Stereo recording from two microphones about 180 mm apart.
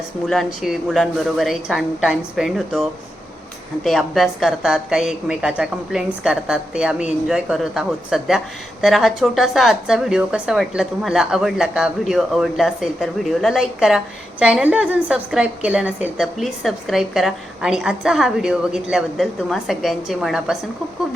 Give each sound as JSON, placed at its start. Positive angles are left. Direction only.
{"t": 0.3, "sound": "a woman's voice", "side_deg": 0}
{"t": 3.8, "sound": "a woman's voice", "side_deg": 0}